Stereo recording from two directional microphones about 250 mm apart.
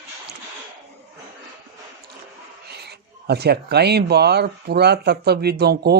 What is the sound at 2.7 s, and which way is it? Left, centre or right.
Speech, right.